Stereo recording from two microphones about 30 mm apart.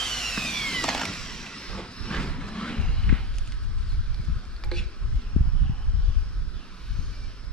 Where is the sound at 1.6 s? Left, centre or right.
Left.